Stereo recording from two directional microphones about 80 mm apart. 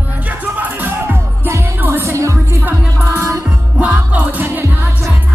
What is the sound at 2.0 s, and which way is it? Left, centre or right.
Music, right.